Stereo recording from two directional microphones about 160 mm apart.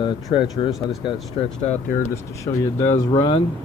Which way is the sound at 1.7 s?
55° left (ahead or behind).